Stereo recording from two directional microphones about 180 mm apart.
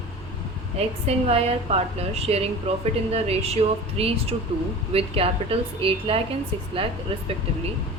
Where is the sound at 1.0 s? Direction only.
35° right (ahead or behind).